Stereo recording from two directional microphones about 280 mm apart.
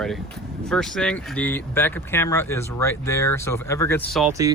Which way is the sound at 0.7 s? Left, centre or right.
Centre.